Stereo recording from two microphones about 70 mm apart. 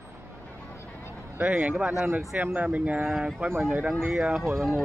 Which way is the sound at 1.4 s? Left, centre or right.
Right.